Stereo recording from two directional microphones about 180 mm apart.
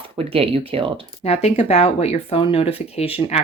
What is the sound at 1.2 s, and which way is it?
Speech, 35° left (ahead or behind).